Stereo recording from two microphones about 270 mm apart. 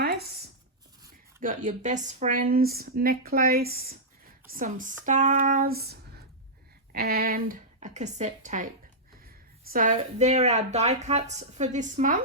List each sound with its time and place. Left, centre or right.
1.0 s a woman's voice: right
9.7 s a woman's voice: right